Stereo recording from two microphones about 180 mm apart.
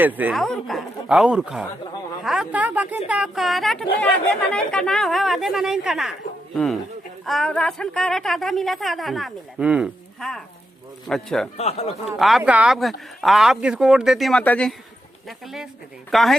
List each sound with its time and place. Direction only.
0.0 s a woman's voice: 10° right (ahead or behind)
7.3 s a woman's voice: centre (ahead or behind)
11.5 s speech: 35° left (ahead or behind)
12.0 s a woman's voice: centre (ahead or behind)